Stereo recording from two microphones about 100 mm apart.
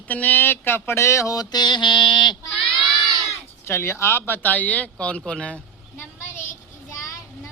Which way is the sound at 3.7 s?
25° left (ahead or behind).